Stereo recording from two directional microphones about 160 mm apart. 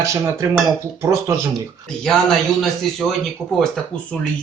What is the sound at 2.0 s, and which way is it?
Speech, 5° left (ahead or behind).